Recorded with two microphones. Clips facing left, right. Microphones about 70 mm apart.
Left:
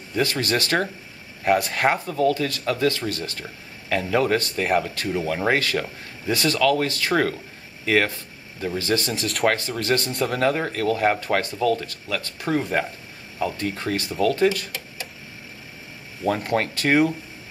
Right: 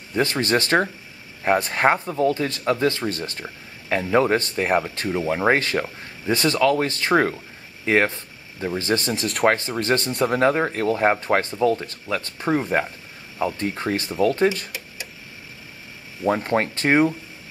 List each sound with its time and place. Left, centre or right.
0.1 s speech: right
16.3 s speech: right